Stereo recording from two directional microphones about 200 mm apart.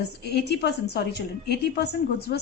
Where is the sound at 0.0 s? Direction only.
55° left (ahead or behind).